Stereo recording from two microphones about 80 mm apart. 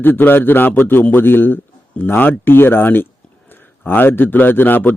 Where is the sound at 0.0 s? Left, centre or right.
Left.